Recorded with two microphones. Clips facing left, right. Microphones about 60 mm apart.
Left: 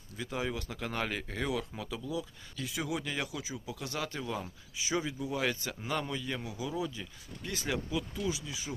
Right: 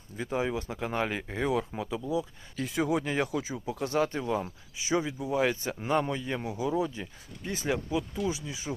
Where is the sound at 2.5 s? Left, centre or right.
Right.